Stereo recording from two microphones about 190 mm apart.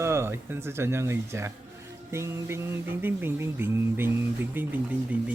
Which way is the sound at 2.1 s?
15° right (ahead or behind).